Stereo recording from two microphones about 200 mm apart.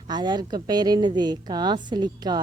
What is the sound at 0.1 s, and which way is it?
A woman's voice, 20° right (ahead or behind).